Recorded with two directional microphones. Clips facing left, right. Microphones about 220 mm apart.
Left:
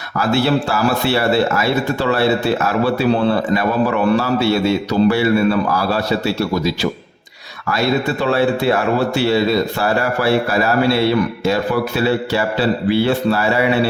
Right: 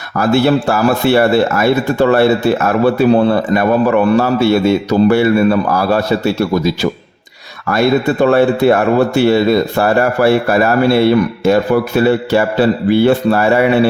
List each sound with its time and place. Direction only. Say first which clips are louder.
0.2 s a man's voice: right 4 dB; 50° right (ahead or behind)